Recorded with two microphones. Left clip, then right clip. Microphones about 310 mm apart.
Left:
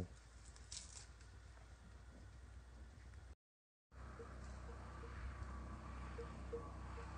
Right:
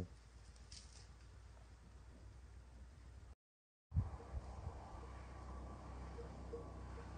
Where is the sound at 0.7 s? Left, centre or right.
Right.